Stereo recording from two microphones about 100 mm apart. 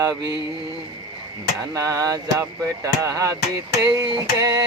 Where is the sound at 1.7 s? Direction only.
35° right (ahead or behind).